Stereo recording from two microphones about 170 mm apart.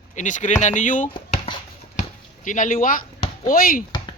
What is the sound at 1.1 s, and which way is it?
Chopping, 30° left (ahead or behind).